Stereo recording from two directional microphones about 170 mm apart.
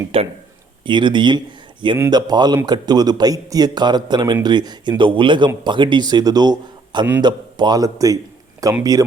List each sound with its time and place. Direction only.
0.1 s a man's voice: 35° right (ahead or behind)